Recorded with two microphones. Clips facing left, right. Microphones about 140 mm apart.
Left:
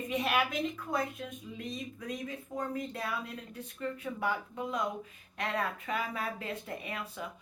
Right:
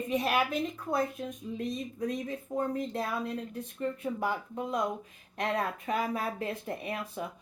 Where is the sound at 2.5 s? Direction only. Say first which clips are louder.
Right 5 dB; 30° right (ahead or behind).